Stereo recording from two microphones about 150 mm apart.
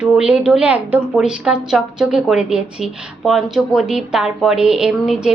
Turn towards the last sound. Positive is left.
turn(degrees=-5)  # may be behind; listen again after turning